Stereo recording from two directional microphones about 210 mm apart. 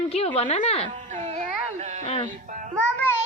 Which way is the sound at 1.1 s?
35° right (ahead or behind).